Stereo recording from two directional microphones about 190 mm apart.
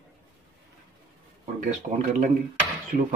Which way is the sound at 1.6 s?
40° right (ahead or behind).